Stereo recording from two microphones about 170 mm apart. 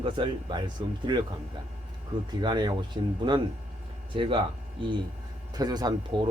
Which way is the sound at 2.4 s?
25° right (ahead or behind).